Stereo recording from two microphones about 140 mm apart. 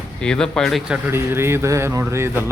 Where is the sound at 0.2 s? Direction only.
5° left (ahead or behind).